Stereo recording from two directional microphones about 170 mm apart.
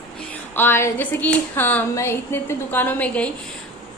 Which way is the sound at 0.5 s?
15° left (ahead or behind).